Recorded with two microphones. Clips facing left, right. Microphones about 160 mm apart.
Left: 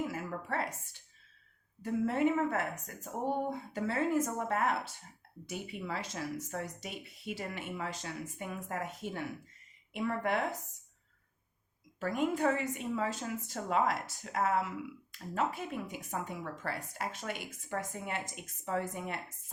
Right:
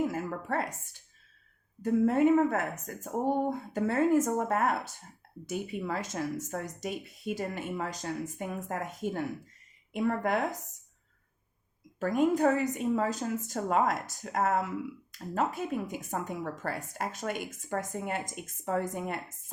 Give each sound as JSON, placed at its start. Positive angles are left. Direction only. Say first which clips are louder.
{"t": 0.1, "sound": "a sound", "louder": "right 5 dB", "side_deg": -45}
{"t": 1.8, "sound": "speech", "louder": "right 6 dB", "side_deg": -45}
{"t": 11.9, "sound": "speech", "louder": "right 6 dB", "side_deg": -45}